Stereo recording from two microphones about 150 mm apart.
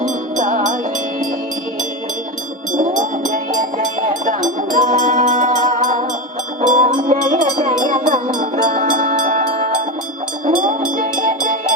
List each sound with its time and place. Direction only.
0.3 s music: 60° right (ahead or behind)
2.7 s music: 60° right (ahead or behind)
8.7 s music: 60° right (ahead or behind)
10.4 s music: 60° right (ahead or behind)